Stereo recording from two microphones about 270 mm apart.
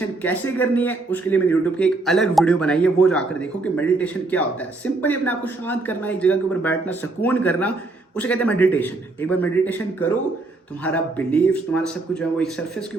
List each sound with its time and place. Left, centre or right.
0.2 s a man's voice: centre